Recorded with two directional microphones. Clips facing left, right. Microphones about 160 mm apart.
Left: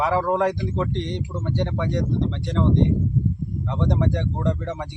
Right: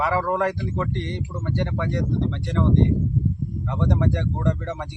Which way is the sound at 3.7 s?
15° left (ahead or behind).